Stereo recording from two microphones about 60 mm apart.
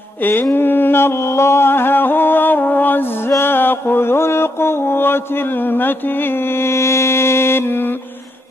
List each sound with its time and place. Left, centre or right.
0.2 s mantra: left